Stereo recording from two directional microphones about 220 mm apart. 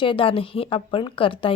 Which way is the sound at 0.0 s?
25° left (ahead or behind).